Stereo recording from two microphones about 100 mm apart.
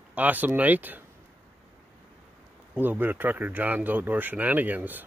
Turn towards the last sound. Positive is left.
turn(degrees=-15)  # may be behind; listen again after turning